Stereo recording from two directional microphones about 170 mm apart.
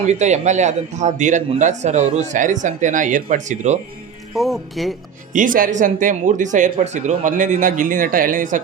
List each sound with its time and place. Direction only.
0.0 s a man's voice: 40° right (ahead or behind)
4.4 s speech: centre (ahead or behind)
5.3 s a man's voice: 50° right (ahead or behind)